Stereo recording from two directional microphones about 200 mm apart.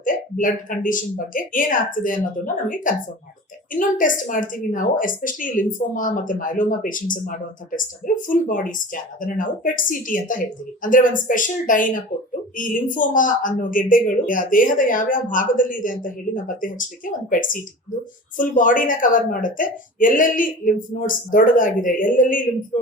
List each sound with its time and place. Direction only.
0.0 s speech: 40° left (ahead or behind)